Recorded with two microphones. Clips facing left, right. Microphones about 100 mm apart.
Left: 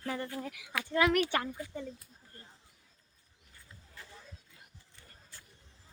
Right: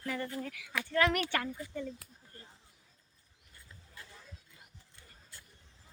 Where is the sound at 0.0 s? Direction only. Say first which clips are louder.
Even; 30° left (ahead or behind).